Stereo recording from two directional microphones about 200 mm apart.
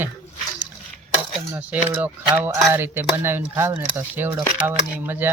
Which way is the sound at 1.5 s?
10° right (ahead or behind).